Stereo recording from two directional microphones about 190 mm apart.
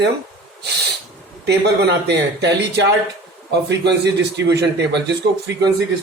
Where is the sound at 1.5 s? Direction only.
60° right (ahead or behind).